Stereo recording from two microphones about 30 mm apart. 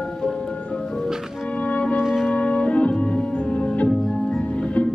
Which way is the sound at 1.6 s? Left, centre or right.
Left.